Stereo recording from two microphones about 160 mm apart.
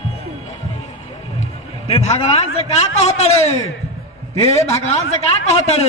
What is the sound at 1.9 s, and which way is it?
A man's voice, 40° left (ahead or behind).